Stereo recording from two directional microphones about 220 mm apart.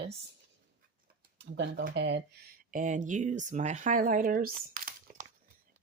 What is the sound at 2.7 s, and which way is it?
Speech, 35° right (ahead or behind).